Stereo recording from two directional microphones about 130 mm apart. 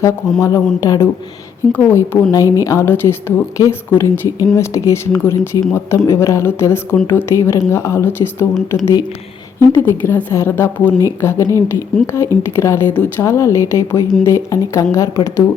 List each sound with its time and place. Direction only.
0.3 s a woman's voice: 25° left (ahead or behind)